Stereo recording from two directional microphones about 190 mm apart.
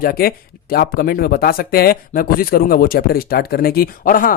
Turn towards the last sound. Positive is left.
turn(degrees=50)  # may be behind; listen again after turning